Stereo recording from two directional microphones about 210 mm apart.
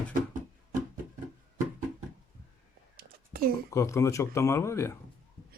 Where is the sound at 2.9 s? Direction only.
45° right (ahead or behind).